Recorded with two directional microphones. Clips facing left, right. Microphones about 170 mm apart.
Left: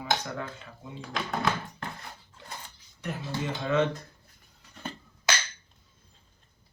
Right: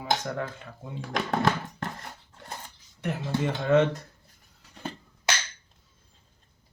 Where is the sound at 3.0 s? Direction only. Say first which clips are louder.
Right 5 dB; 55° right (ahead or behind).